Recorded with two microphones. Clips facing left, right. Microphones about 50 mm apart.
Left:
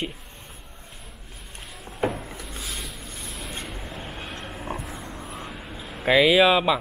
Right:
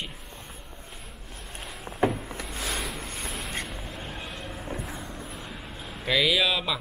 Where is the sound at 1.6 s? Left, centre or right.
Centre.